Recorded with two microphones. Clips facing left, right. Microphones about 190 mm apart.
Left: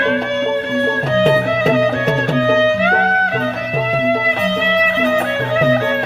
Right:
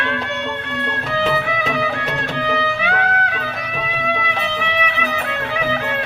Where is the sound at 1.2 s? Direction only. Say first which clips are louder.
Left 7 dB; 40° left (ahead or behind).